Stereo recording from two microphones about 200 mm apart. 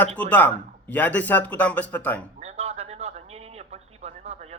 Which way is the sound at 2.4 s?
30° right (ahead or behind).